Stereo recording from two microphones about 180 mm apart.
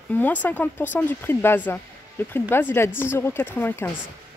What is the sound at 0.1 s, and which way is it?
Speech, 10° left (ahead or behind).